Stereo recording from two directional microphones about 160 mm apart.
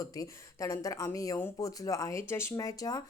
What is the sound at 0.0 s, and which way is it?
Speech, 20° left (ahead or behind).